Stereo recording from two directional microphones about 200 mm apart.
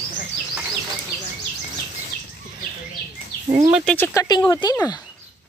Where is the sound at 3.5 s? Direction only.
20° right (ahead or behind).